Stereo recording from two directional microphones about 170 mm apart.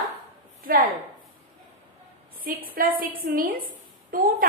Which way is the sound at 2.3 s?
55° right (ahead or behind).